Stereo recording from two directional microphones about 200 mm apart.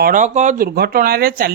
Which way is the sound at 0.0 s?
40° right (ahead or behind).